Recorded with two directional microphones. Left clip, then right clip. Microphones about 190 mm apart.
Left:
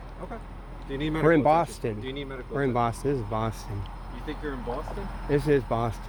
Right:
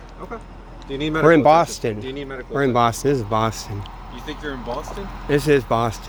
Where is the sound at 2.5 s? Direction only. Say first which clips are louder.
Right 8 dB; 30° right (ahead or behind).